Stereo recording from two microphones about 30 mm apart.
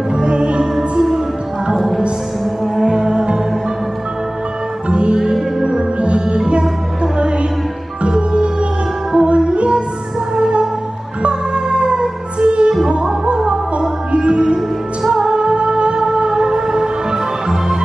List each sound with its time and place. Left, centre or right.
0.1 s music: right
2.9 s music: right
4.8 s music: right
5.2 s music: centre
5.9 s music: right
6.2 s music: right
11.2 s music: right
16.5 s music: centre